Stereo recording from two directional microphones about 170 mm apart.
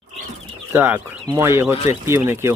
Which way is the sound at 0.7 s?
10° right (ahead or behind).